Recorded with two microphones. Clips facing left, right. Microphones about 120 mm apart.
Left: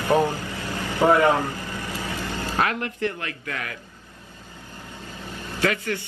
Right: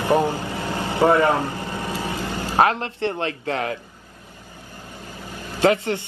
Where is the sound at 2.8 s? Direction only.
25° right (ahead or behind).